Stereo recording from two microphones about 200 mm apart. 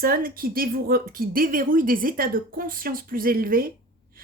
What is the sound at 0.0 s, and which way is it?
A woman's voice, 45° right (ahead or behind).